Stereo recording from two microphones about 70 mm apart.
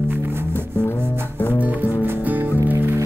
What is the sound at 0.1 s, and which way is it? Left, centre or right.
Music, right.